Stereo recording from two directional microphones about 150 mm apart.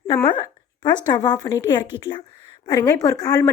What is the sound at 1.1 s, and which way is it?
A woman's voice, 30° left (ahead or behind).